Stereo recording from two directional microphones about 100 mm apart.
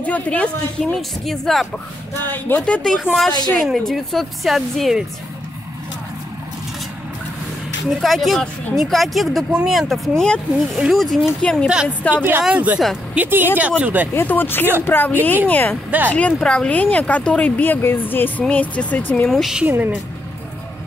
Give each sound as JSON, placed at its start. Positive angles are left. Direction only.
{"t": 0.0, "sound": "a woman's voice", "side_deg": 15}
{"t": 2.2, "sound": "a woman's voice", "side_deg": 15}
{"t": 7.9, "sound": "a woman's voice", "side_deg": 0}
{"t": 12.2, "sound": "speech", "side_deg": -20}
{"t": 14.1, "sound": "a woman's voice", "side_deg": 20}
{"t": 19.3, "sound": "a woman's voice", "side_deg": 0}
{"t": 19.6, "sound": "speech", "side_deg": -15}